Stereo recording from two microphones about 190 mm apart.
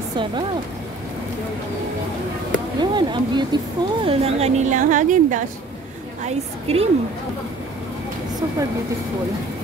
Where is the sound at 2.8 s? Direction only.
25° right (ahead or behind).